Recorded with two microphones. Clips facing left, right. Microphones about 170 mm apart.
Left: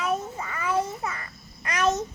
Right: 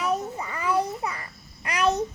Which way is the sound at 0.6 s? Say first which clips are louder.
Right 1 dB; 15° right (ahead or behind).